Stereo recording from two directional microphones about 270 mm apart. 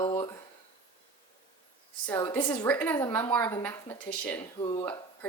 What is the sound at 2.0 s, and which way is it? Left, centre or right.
A woman's voice, centre.